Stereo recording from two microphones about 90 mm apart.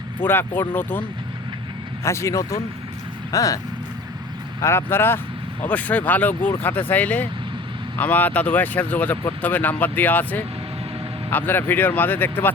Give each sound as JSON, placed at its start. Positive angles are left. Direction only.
{"t": 0.2, "sound": "speech", "side_deg": 20}
{"t": 2.0, "sound": "speech", "side_deg": 35}
{"t": 4.6, "sound": "speech", "side_deg": 25}